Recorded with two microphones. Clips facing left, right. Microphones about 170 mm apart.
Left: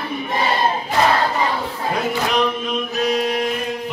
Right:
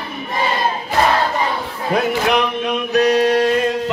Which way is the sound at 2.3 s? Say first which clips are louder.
Right 2 dB; 70° right (ahead or behind).